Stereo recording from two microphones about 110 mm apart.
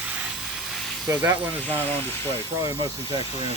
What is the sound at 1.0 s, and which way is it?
Speech, 25° right (ahead or behind).